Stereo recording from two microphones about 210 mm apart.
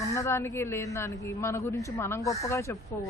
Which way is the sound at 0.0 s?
15° left (ahead or behind).